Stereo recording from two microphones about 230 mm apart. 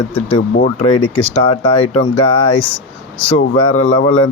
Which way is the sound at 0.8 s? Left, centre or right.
Left.